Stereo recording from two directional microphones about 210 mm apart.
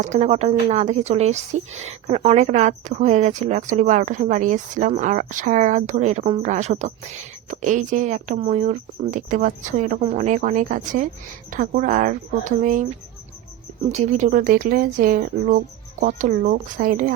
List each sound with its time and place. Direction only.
0.0 s speech: 30° right (ahead or behind)
13.9 s speech: 35° right (ahead or behind)